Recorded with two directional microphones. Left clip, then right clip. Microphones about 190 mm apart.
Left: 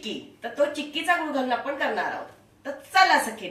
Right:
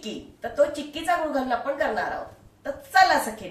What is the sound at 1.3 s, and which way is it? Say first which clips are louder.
Speech: right 1 dB; 10° right (ahead or behind).